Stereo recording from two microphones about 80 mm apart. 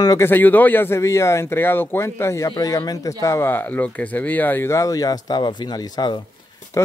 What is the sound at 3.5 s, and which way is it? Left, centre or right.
Speech, left.